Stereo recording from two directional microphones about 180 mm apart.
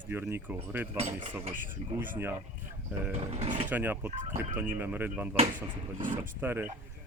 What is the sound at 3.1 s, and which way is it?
Speech, 35° right (ahead or behind).